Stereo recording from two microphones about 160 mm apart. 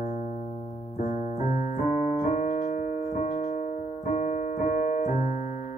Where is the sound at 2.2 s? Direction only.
50° left (ahead or behind).